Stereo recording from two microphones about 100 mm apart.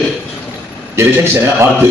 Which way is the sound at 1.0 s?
25° right (ahead or behind).